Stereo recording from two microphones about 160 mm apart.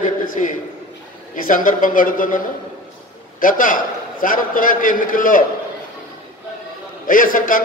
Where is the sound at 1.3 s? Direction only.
55° left (ahead or behind).